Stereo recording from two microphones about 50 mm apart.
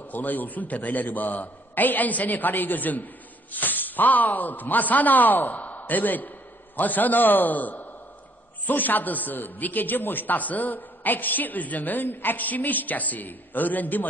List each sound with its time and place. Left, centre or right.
0.1 s a man's voice: left